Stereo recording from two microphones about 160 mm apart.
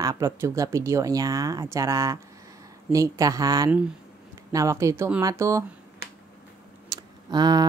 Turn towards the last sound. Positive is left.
turn(degrees=-25)  # may be behind; listen again after turning